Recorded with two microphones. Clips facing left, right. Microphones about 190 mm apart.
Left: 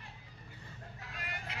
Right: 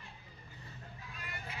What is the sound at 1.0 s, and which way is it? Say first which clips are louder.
Vehicle: left 3 dB; 90° left.